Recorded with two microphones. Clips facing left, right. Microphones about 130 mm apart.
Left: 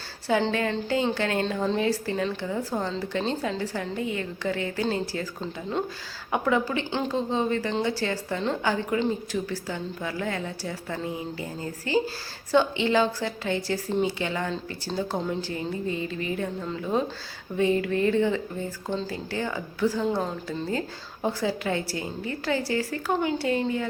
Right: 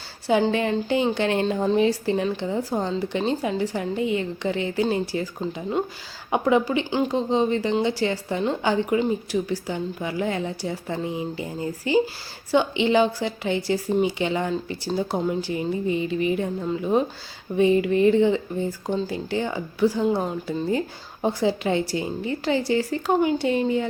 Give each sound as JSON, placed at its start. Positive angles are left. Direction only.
{"t": 0.3, "sound": "a woman's voice", "side_deg": -20}